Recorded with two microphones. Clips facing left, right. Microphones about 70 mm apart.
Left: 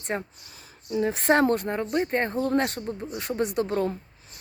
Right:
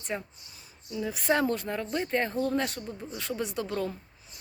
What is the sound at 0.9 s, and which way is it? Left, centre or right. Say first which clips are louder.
Speech: left 6 dB; left.